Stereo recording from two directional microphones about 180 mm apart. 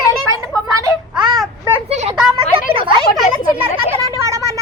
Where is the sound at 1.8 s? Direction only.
40° right (ahead or behind).